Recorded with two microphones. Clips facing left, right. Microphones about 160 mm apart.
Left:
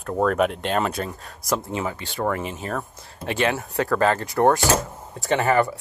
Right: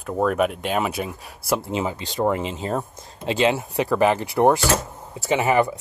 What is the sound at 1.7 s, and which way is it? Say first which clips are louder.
Speech: right 2 dB; 20° right (ahead or behind).